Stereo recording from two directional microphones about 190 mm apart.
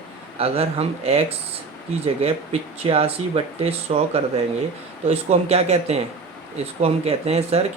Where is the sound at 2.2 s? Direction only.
30° right (ahead or behind).